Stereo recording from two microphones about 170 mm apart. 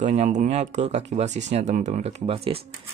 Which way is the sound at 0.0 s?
40° right (ahead or behind).